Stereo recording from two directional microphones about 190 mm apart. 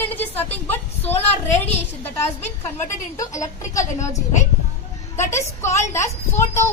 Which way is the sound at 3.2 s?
15° left (ahead or behind).